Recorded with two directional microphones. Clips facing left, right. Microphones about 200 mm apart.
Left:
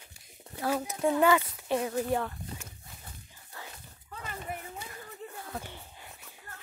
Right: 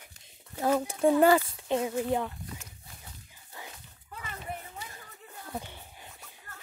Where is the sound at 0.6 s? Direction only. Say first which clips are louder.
Right 4 dB; 30° right (ahead or behind).